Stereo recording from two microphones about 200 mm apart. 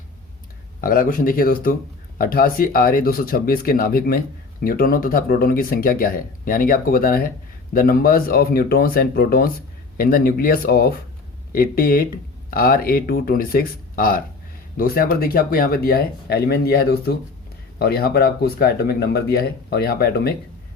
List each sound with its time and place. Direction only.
0.8 s speech: 45° left (ahead or behind)